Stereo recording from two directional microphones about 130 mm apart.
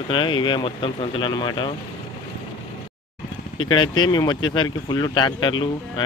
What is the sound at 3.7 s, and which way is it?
Speech, 35° left (ahead or behind).